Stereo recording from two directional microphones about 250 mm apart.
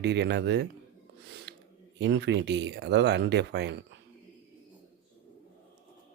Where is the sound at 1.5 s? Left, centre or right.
Right.